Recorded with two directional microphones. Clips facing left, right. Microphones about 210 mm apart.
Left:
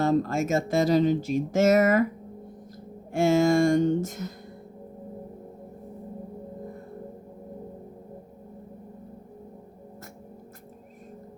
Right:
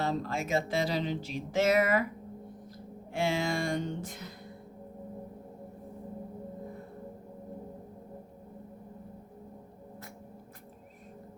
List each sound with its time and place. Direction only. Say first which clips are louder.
0.0 s speech: left 9 dB; 45° left (ahead or behind)
3.1 s speech: left 10 dB; 45° left (ahead or behind)